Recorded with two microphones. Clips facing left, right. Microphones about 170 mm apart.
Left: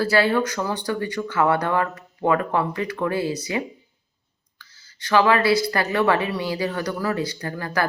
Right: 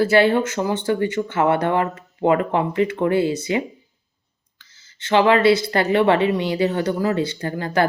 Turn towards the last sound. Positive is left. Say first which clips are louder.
# right 5 dB
turn(degrees=-25)  # may be behind; listen again after turning